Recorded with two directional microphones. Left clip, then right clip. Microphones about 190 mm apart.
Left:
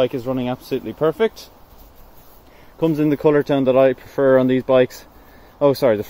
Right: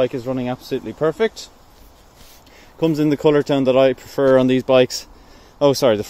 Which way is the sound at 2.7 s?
15° right (ahead or behind).